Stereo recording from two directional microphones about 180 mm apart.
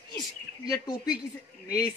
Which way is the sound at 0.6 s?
20° left (ahead or behind).